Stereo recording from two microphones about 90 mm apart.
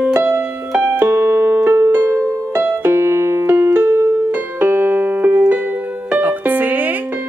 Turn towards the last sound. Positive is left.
turn(degrees=-20)  # may be behind; listen again after turning